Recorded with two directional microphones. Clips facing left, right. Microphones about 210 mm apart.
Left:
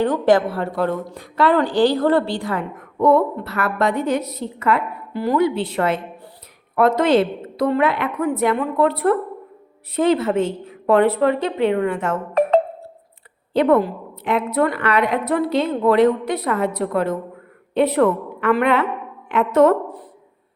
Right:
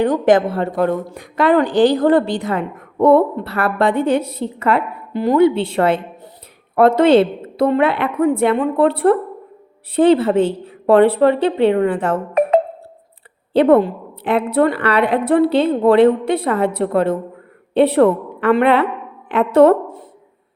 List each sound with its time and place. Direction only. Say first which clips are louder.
0.0 s a woman's voice: right 3 dB; 15° right (ahead or behind); by 12.2 s 30° right (ahead or behind)
13.5 s a woman's voice: right 4 dB; 30° right (ahead or behind)